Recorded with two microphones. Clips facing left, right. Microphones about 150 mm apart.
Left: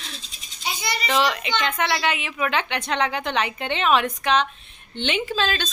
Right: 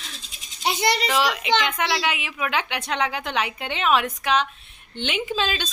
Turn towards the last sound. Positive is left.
turn(degrees=-10)  # may be behind; listen again after turning